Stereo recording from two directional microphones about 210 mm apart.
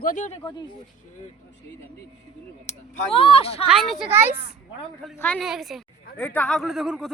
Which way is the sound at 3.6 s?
Centre (ahead or behind).